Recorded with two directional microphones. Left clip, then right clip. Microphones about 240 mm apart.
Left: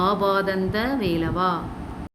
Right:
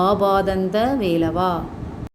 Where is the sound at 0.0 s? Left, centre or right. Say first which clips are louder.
Right 4 dB; centre.